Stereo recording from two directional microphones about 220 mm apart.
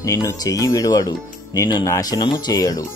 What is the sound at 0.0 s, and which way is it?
Speech, 15° left (ahead or behind).